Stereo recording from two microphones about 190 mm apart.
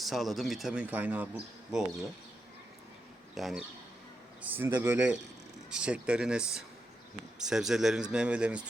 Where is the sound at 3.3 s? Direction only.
Centre (ahead or behind).